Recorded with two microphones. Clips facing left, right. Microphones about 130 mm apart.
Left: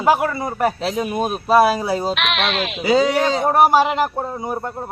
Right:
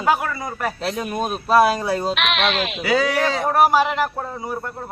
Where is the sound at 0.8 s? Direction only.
10° left (ahead or behind).